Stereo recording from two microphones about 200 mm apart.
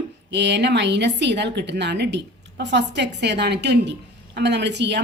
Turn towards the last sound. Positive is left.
turn(degrees=-60)  # may be behind; listen again after turning